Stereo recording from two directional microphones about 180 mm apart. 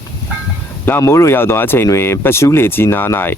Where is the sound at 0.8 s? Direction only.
15° left (ahead or behind).